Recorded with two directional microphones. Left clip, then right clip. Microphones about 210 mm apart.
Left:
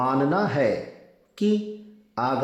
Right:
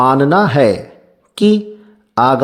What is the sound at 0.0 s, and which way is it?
Speech, 45° right (ahead or behind).